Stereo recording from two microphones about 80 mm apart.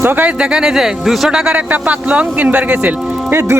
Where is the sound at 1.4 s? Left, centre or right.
Centre.